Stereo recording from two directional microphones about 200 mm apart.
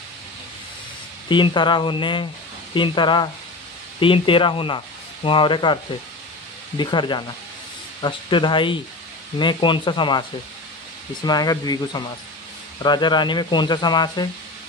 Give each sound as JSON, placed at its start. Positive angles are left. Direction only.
{"t": 1.3, "sound": "speech", "side_deg": 25}
{"t": 6.8, "sound": "speech", "side_deg": 25}
{"t": 11.2, "sound": "speech", "side_deg": 20}